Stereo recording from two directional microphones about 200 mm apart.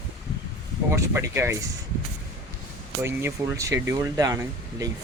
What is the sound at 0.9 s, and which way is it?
Speech, 15° right (ahead or behind).